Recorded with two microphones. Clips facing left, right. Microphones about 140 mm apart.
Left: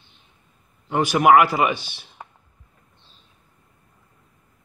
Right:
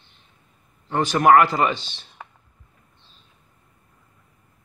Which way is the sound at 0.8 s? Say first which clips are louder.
Left 1 dB; 10° left (ahead or behind).